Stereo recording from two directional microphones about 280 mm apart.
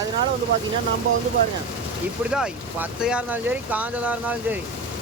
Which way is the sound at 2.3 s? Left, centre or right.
Centre.